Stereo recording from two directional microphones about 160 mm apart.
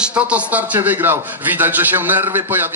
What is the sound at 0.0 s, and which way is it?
A man's voice, 5° right (ahead or behind).